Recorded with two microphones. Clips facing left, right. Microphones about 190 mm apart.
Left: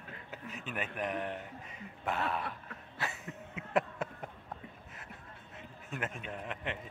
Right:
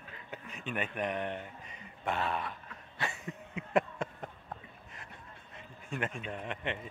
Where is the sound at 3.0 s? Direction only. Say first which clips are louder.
Right 2 dB; 5° left (ahead or behind).